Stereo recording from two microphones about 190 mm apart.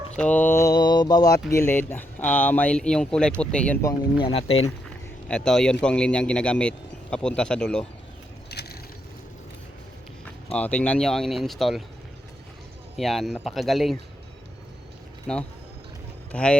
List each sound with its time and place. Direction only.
0.2 s speech: 10° left (ahead or behind)
4.3 s speech: 30° left (ahead or behind)
5.3 s a man's voice: 5° left (ahead or behind)
8.4 s mechanisms: 60° left (ahead or behind)
10.5 s a man's voice: 5° left (ahead or behind)
13.0 s a man's voice: centre (ahead or behind)
15.3 s a man's voice: 5° left (ahead or behind)